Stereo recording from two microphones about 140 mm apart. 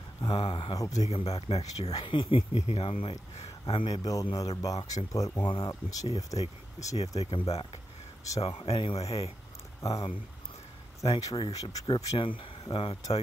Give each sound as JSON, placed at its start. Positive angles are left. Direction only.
{"t": 0.2, "sound": "speech", "side_deg": 40}
{"t": 0.7, "sound": "speech", "side_deg": 25}
{"t": 1.1, "sound": "speech", "side_deg": 45}
{"t": 1.9, "sound": "speech", "side_deg": 35}
{"t": 3.9, "sound": "speech", "side_deg": 25}
{"t": 7.2, "sound": "speech", "side_deg": 45}
{"t": 11.1, "sound": "speech", "side_deg": 35}